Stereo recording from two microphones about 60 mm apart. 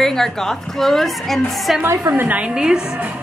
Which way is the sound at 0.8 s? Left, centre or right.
Centre.